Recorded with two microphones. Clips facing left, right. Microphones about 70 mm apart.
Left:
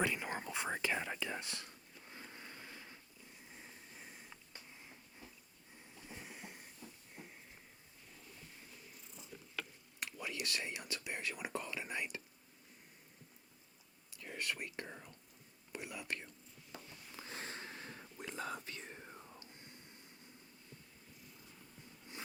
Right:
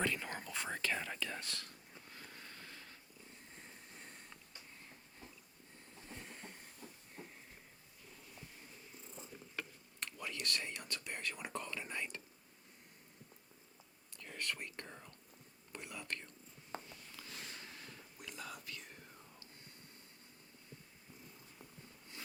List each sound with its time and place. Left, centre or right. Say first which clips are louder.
0.0 s whispering: left 2 dB; centre
3.5 s a sound: left 2 dB; centre
6.1 s train: even; centre
6.8 s hiss: right 1 dB; right
7.2 s a sound: right 2 dB; centre
10.0 s whispering: left 1 dB; centre
14.2 s whispering: left 1 dB; centre
16.7 s a sound: right 6 dB; right
17.1 s whispering: left 6 dB; left